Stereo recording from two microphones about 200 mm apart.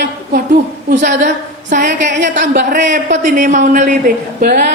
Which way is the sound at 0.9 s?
40° right (ahead or behind).